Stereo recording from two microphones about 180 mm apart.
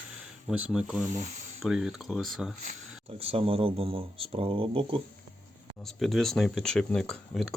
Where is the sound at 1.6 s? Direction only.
5° right (ahead or behind).